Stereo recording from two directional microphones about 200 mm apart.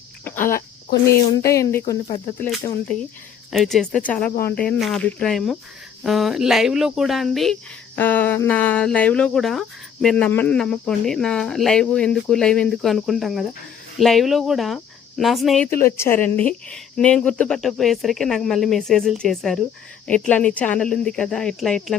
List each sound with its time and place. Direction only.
0.3 s speech: 10° left (ahead or behind)
3.5 s speech: centre (ahead or behind)